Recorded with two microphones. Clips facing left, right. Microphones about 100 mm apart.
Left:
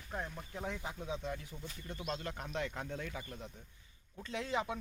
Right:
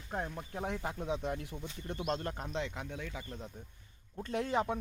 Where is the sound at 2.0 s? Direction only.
40° right (ahead or behind).